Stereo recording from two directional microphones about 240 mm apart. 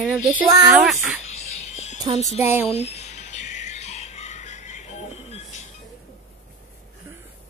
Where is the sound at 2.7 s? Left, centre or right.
Left.